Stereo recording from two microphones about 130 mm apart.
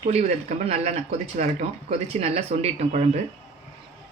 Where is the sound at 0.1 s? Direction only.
60° right (ahead or behind).